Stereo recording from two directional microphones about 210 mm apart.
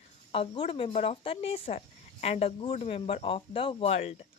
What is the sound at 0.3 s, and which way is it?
A woman's voice, 25° left (ahead or behind).